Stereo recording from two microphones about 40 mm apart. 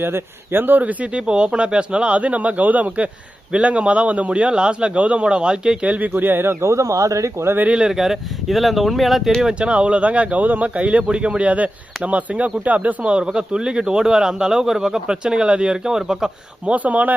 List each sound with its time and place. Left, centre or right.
0.0 s speech: right
0.8 s speech: right
5.8 s speech: right
6.1 s a man's voice: right
7.9 s speech: centre
9.6 s speech: right; by 16.3 s centre
16.6 s speech: right